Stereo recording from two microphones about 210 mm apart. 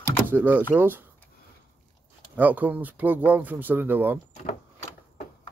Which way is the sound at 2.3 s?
10° right (ahead or behind).